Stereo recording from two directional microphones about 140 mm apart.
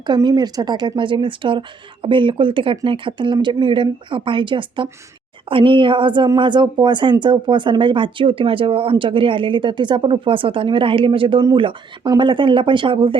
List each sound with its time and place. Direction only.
0.0 s a woman's voice: 30° right (ahead or behind)